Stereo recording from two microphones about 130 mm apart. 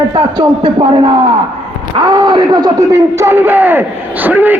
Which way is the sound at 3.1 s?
20° right (ahead or behind).